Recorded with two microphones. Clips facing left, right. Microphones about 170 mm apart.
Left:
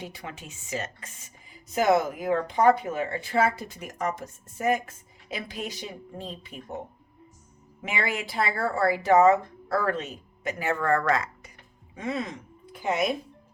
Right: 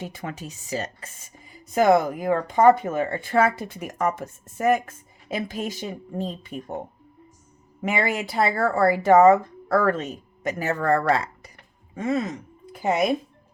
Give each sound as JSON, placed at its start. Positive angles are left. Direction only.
{"t": 0.0, "sound": "a woman's voice", "side_deg": -45}
{"t": 1.7, "sound": "speech", "side_deg": -45}
{"t": 11.9, "sound": "speech", "side_deg": -45}